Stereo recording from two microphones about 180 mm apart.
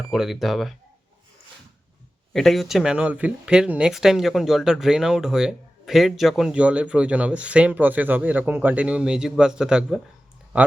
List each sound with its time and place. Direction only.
0.1 s speech: centre (ahead or behind)
2.3 s speech: centre (ahead or behind)